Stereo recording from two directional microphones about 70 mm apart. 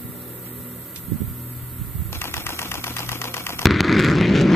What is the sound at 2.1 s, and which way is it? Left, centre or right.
Typewriter, left.